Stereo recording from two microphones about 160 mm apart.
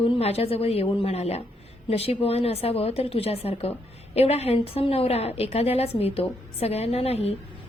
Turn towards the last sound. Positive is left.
turn(degrees=40)  # may be behind; listen again after turning